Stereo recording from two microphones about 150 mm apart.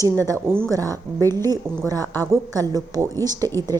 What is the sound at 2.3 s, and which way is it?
A woman's voice, 25° right (ahead or behind).